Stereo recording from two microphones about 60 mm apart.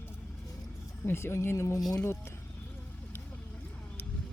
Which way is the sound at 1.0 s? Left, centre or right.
Left.